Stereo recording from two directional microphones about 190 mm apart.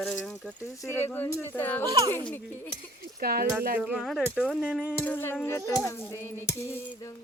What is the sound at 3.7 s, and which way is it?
Speech, 5° right (ahead or behind).